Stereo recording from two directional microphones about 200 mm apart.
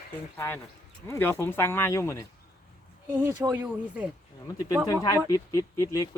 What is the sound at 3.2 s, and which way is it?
Speech, 10° right (ahead or behind).